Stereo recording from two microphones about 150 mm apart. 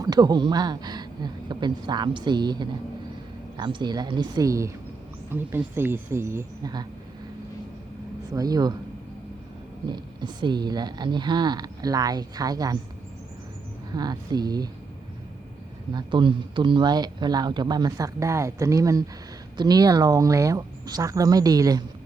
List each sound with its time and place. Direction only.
0.0 s speech: 25° right (ahead or behind)
8.3 s speech: 25° right (ahead or behind)
9.9 s speech: 30° right (ahead or behind)
13.9 s speech: 25° right (ahead or behind)
15.9 s speech: 30° right (ahead or behind)